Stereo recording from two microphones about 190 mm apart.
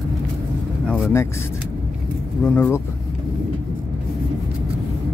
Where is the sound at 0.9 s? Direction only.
10° left (ahead or behind).